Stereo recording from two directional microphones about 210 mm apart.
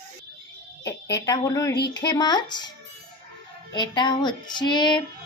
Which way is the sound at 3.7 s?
20° left (ahead or behind).